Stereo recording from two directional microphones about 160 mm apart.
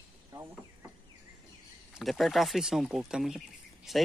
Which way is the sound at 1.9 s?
Centre (ahead or behind).